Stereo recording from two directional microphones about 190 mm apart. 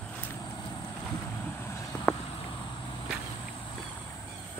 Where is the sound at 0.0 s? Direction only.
10° left (ahead or behind).